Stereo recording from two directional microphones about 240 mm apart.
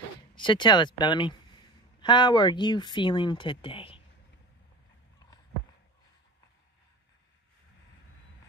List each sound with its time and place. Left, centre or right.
0.4 s speech: centre